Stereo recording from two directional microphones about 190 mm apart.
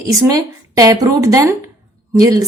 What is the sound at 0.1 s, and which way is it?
A woman's voice, 15° right (ahead or behind).